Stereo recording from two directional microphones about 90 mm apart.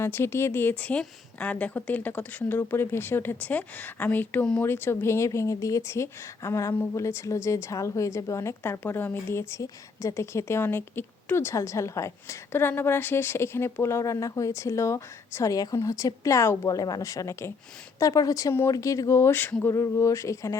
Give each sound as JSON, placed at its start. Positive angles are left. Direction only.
{"t": 0.0, "sound": "a woman's voice", "side_deg": 25}
{"t": 16.6, "sound": "speech", "side_deg": 45}
{"t": 19.3, "sound": "a woman's voice", "side_deg": 20}
{"t": 19.7, "sound": "speech", "side_deg": 35}